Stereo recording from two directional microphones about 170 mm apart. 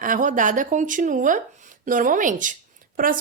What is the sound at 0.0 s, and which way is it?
Speech, 50° right (ahead or behind).